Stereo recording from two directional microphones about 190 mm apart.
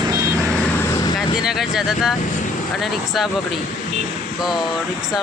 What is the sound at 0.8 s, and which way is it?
Vehicle, 20° left (ahead or behind).